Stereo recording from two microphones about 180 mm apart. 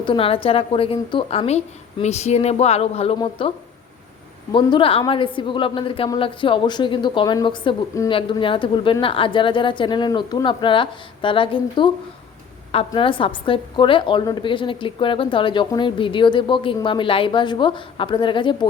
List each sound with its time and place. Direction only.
0.0 s a woman's voice: 30° left (ahead or behind)
4.5 s a woman's voice: 30° left (ahead or behind)